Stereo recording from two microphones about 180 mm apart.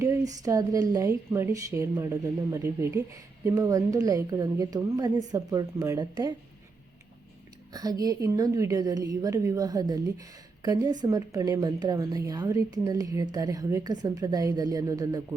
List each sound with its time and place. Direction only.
0.0 s a woman's voice: 20° right (ahead or behind)
7.7 s a woman's voice: 20° right (ahead or behind)